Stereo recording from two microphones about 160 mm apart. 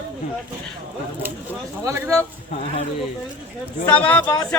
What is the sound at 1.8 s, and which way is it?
Speech, 20° right (ahead or behind).